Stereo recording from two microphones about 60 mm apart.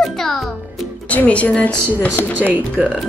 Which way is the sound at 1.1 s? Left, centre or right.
Left.